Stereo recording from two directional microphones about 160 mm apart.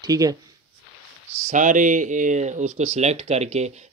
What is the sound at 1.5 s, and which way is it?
Speech, 50° right (ahead or behind).